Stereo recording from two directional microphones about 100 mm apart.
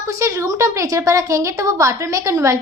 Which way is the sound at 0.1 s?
30° right (ahead or behind).